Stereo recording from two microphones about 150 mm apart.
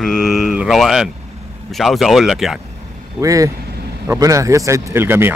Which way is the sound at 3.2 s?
20° right (ahead or behind).